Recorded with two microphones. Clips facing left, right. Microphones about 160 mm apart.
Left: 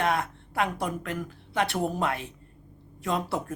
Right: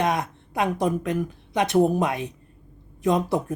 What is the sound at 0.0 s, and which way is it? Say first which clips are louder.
Speech: right 3 dB; 20° right (ahead or behind).